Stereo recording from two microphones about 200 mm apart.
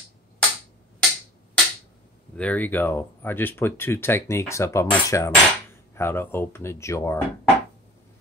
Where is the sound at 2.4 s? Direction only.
10° left (ahead or behind).